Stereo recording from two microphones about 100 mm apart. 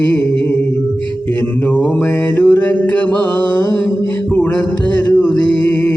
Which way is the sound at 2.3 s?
15° left (ahead or behind).